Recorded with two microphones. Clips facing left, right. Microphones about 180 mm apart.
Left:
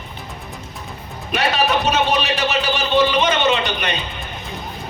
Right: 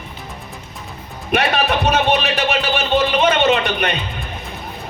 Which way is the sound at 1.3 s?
60° right (ahead or behind).